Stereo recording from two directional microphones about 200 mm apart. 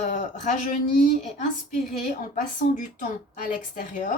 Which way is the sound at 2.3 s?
40° left (ahead or behind).